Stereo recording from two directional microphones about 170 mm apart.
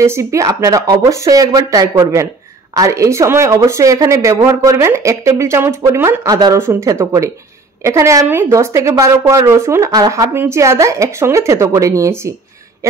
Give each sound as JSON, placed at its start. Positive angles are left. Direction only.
{"t": 0.0, "sound": "speech", "side_deg": -15}